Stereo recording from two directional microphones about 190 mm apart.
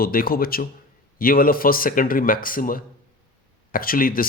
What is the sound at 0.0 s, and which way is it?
Speech, 50° left (ahead or behind).